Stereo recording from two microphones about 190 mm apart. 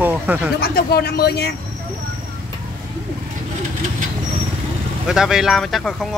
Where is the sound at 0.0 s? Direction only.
10° right (ahead or behind).